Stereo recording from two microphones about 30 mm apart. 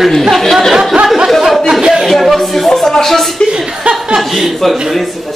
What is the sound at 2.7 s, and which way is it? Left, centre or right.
Music, centre.